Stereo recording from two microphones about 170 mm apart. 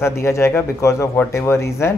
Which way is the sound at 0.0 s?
15° left (ahead or behind).